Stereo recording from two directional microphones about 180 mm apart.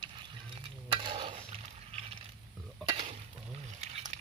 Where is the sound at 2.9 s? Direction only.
35° right (ahead or behind).